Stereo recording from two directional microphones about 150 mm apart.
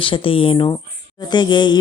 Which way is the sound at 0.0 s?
35° left (ahead or behind).